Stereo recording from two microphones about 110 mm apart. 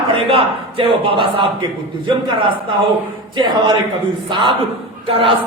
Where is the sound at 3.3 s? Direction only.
45° right (ahead or behind).